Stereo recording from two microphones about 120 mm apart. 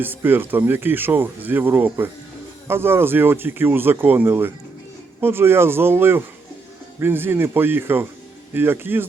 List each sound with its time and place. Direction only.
0.0 s speech: 15° right (ahead or behind)